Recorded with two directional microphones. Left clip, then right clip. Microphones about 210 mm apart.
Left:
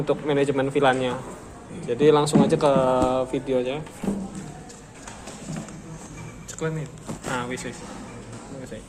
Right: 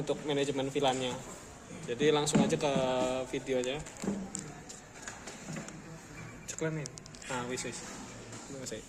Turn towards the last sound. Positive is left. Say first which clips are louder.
# left 8 dB
turn(degrees=-20)  # may be behind; listen again after turning